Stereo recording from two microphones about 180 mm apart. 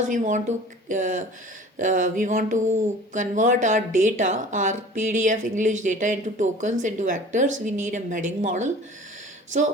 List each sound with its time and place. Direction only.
0.0 s speech: 45° right (ahead or behind)